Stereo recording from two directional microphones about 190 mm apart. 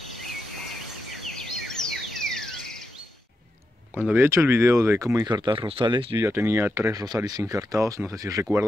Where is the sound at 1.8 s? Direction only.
Centre (ahead or behind).